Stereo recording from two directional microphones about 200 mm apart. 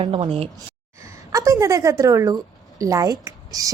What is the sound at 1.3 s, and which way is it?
A woman's voice, 15° right (ahead or behind).